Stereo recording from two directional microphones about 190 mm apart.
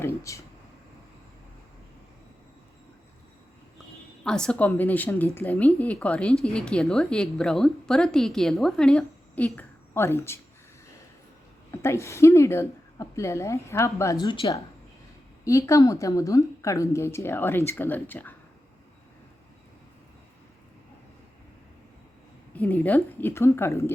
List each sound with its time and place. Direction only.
0.0 s a woman's voice: 15° left (ahead or behind)
4.2 s a woman's voice: 5° left (ahead or behind)
11.7 s a woman's voice: 15° left (ahead or behind)
22.5 s a woman's voice: 10° left (ahead or behind)